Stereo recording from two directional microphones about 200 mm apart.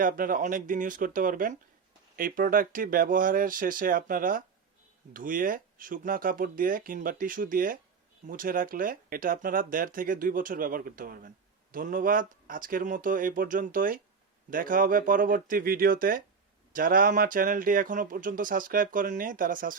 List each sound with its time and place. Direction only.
0.0 s speech: 45° right (ahead or behind)